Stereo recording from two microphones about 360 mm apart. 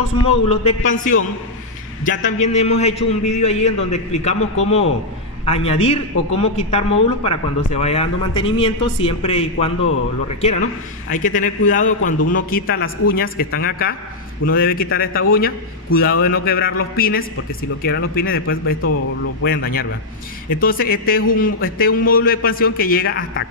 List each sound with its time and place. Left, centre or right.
0.8 s a man's voice: left
19.4 s a man's voice: left